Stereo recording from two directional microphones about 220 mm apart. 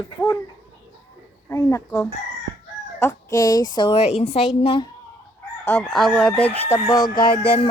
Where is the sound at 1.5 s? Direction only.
10° left (ahead or behind).